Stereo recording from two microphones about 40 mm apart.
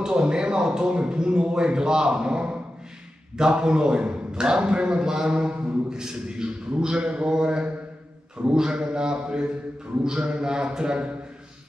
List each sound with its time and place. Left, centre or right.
0.0 s a man's voice: right